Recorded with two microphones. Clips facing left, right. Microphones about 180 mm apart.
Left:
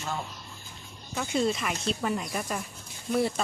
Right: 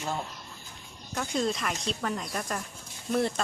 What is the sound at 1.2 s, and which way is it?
Speech, 5° left (ahead or behind).